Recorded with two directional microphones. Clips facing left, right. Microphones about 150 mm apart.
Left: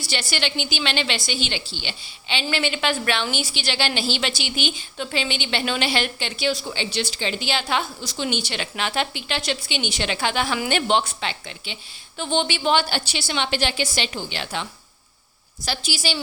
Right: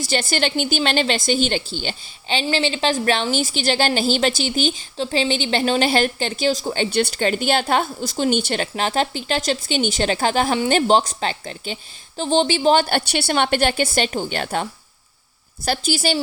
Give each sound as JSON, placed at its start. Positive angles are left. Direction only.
{"t": 0.0, "sound": "a woman's voice", "side_deg": -45}